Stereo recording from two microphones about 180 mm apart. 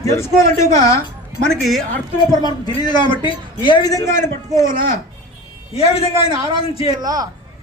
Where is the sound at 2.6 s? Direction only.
25° left (ahead or behind).